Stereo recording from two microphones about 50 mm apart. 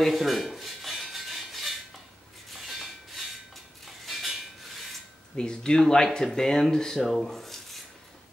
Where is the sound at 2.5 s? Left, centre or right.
Centre.